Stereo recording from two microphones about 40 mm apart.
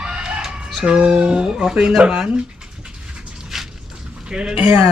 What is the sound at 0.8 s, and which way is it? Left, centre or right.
Speech, right.